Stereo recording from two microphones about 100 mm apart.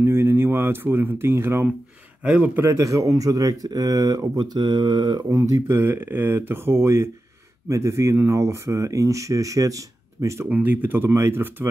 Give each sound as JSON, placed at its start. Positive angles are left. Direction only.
{"t": 0.0, "sound": "speech", "side_deg": -25}
{"t": 2.6, "sound": "speech", "side_deg": -30}
{"t": 5.3, "sound": "speech", "side_deg": -30}
{"t": 10.5, "sound": "speech", "side_deg": -15}